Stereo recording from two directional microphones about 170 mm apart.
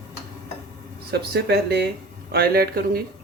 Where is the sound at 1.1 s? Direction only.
75° right (ahead or behind).